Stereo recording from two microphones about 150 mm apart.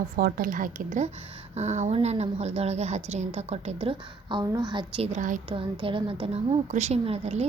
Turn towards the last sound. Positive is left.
turn(degrees=-45)  # may be behind; listen again after turning